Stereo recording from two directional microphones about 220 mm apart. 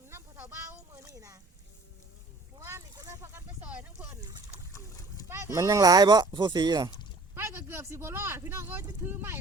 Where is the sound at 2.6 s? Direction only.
15° right (ahead or behind).